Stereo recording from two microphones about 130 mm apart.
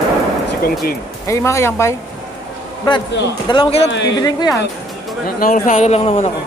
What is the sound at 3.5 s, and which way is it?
Speech, 35° left (ahead or behind).